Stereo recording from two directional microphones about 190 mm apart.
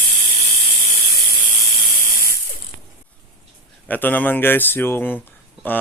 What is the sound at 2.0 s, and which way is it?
Printer, 50° left (ahead or behind).